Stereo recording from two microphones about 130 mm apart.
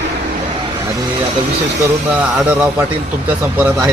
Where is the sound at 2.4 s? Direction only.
15° right (ahead or behind).